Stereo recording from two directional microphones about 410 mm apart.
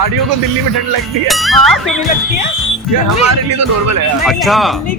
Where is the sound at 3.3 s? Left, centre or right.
Right.